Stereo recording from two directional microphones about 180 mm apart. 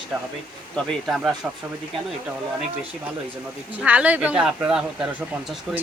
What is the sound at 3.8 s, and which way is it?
Speech, 10° right (ahead or behind).